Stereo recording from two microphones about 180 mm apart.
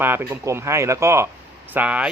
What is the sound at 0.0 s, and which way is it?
Speech, 10° right (ahead or behind).